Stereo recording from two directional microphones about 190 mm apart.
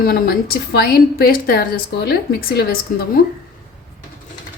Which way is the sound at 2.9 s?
45° left (ahead or behind).